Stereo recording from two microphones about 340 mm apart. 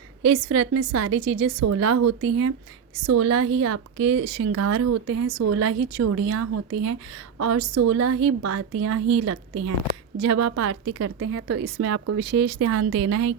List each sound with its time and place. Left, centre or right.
0.2 s a woman's voice: right
4.4 s a woman's voice: right